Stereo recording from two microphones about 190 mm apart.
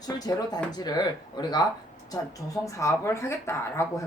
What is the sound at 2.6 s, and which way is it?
Speech, 15° left (ahead or behind).